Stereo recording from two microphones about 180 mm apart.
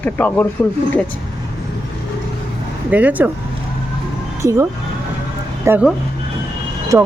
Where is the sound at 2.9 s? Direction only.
10° right (ahead or behind).